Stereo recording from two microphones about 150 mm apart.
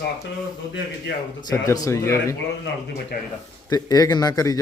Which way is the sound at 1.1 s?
90° left.